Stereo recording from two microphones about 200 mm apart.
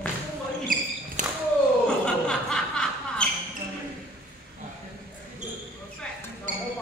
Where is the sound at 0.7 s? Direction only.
45° right (ahead or behind).